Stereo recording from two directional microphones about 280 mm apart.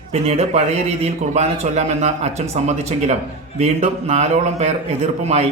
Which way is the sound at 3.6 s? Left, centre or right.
Right.